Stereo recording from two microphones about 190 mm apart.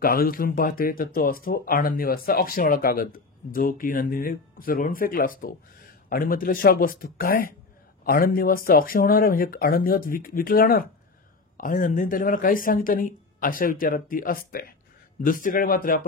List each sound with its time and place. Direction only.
0.0 s speech: 50° left (ahead or behind)